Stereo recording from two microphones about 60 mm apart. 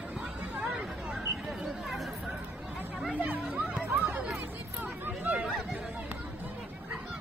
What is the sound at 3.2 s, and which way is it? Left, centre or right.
Chatter, right.